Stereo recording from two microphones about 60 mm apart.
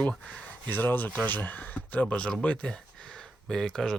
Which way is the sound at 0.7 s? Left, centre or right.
Left.